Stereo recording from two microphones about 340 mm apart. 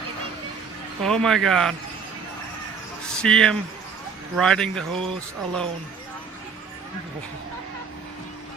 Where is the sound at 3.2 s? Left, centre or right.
Centre.